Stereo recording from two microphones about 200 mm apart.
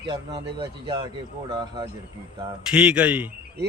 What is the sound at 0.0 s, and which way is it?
Speech, 20° right (ahead or behind).